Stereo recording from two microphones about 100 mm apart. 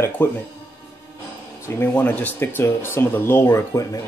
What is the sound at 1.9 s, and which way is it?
Speech, 15° left (ahead or behind).